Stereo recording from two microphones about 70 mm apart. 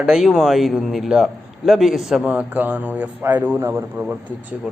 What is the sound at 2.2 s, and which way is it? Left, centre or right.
A man's voice, right.